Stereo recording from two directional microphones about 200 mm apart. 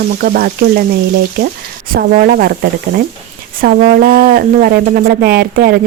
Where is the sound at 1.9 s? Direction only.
50° right (ahead or behind).